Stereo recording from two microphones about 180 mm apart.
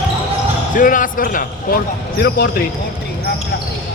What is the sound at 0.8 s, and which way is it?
A man's voice, 50° left (ahead or behind).